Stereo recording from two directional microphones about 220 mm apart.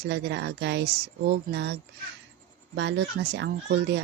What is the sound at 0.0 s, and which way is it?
Speech, 50° right (ahead or behind).